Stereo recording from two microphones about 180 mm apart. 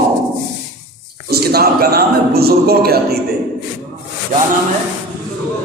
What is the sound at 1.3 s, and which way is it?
Speech, 60° right (ahead or behind).